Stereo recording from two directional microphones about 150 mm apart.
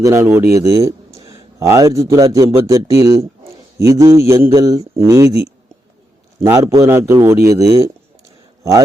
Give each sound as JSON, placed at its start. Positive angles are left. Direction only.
{"t": 0.0, "sound": "a man's voice", "side_deg": -15}
{"t": 6.4, "sound": "a man's voice", "side_deg": -20}